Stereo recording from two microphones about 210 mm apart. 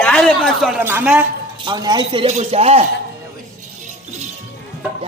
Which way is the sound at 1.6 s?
20° right (ahead or behind).